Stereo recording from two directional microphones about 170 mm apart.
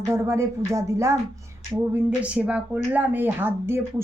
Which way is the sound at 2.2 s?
5° right (ahead or behind).